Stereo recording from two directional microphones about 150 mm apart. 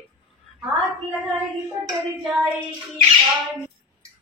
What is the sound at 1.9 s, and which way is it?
Child singing, centre (ahead or behind).